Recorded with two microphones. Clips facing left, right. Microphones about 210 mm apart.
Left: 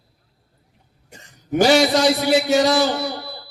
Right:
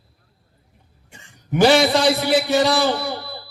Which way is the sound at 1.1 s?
40° left (ahead or behind).